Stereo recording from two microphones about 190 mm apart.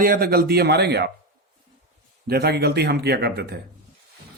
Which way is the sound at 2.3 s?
55° right (ahead or behind).